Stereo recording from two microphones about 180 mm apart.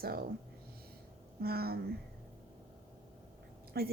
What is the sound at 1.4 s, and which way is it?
Speech, 60° right (ahead or behind).